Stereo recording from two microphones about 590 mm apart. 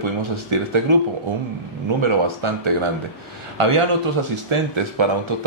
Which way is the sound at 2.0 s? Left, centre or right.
Right.